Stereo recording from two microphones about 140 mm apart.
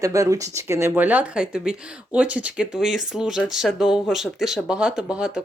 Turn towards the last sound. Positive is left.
turn(degrees=-5)  # may be behind; listen again after turning